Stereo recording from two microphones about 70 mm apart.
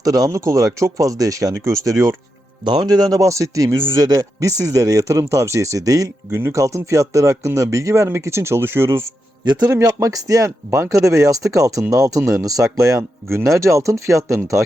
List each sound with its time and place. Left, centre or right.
0.0 s speech: right
2.6 s speech: right
4.0 s speech: right
6.3 s speech: right
9.8 s speech: right
13.0 s speech: right